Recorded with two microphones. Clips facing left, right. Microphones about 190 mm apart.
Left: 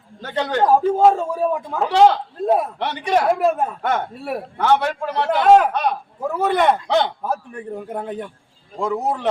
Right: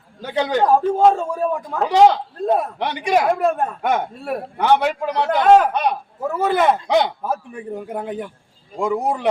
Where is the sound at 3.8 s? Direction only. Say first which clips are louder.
Right 3 dB; 15° right (ahead or behind).